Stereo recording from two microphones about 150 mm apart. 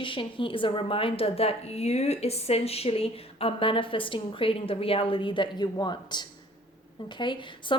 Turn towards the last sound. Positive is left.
turn(degrees=30)  # may be behind; listen again after turning